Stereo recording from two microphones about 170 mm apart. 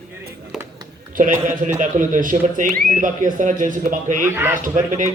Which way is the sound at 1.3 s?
15° right (ahead or behind).